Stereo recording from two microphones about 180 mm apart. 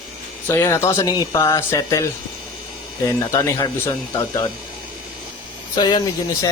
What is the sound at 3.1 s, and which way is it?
Speech, 15° left (ahead or behind).